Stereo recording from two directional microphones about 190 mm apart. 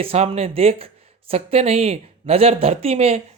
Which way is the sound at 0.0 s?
30° right (ahead or behind).